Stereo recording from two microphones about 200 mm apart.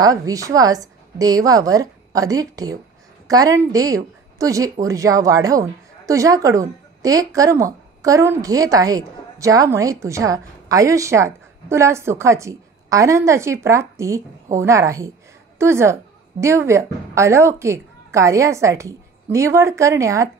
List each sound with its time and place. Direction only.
0.0 s a woman's voice: 15° right (ahead or behind)